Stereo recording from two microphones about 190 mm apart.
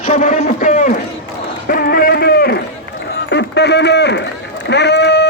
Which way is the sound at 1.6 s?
50° left (ahead or behind).